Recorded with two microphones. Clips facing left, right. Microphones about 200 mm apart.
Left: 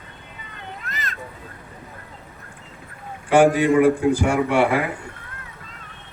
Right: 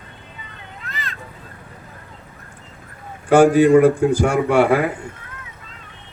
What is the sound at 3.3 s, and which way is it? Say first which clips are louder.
Speech: right 4 dB; 40° right (ahead or behind).